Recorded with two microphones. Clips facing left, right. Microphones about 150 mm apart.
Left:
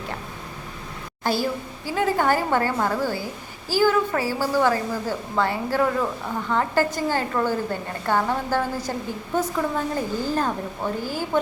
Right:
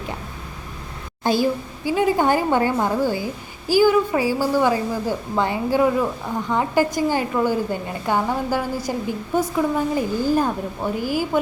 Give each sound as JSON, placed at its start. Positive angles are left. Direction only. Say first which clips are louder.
{"t": 1.2, "sound": "a woman's voice", "louder": "right 4 dB", "side_deg": -20}